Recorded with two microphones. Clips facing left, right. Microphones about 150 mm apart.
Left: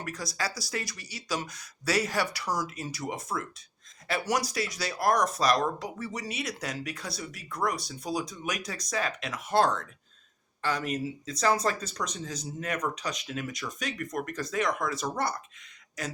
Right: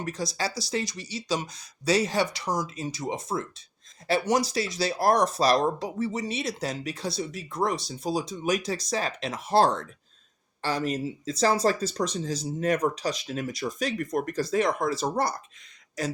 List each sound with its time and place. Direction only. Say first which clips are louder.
0.0 s speech: right 4 dB; 25° right (ahead or behind)